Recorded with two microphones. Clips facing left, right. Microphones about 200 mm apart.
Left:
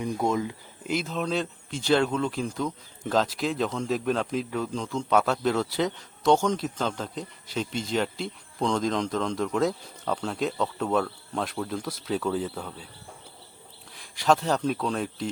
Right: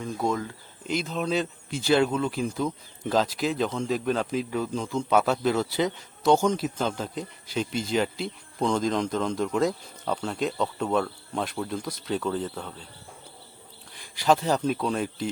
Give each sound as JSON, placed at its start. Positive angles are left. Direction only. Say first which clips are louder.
{"t": 0.0, "sound": "speech", "louder": "left 2 dB", "side_deg": 20}
{"t": 0.9, "sound": "a man's voice", "louder": "right 1 dB", "side_deg": 5}
{"t": 13.9, "sound": "speech", "louder": "right 1 dB", "side_deg": 0}